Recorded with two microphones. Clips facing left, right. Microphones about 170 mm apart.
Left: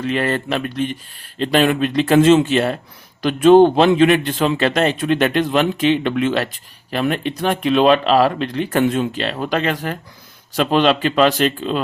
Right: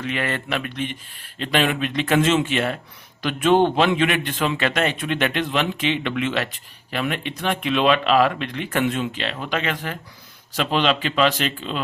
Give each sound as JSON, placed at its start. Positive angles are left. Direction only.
{"t": 0.0, "sound": "a man's voice", "side_deg": 35}